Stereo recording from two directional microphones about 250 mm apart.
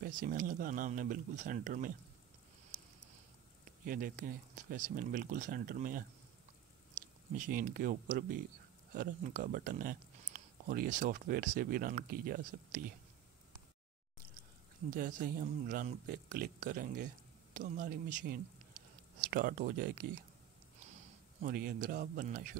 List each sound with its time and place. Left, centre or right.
0.0 s speech: right
3.8 s speech: right
7.3 s speech: right
14.9 s speech: right
21.4 s speech: right